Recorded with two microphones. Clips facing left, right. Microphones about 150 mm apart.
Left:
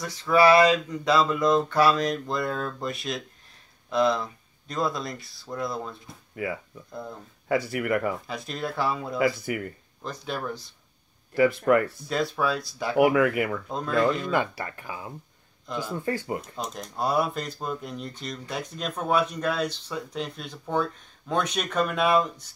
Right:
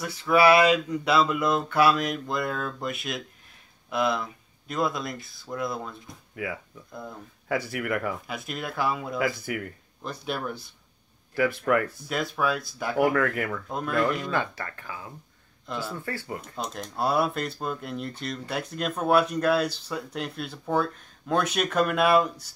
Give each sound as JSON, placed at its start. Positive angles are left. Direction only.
{"t": 0.2, "sound": "speech", "side_deg": -5}
{"t": 7.5, "sound": "speech", "side_deg": -10}
{"t": 7.8, "sound": "speech", "side_deg": 0}
{"t": 11.3, "sound": "speech", "side_deg": 0}
{"t": 13.7, "sound": "speech", "side_deg": -5}
{"t": 14.3, "sound": "speech", "side_deg": 15}
{"t": 16.3, "sound": "speech", "side_deg": 0}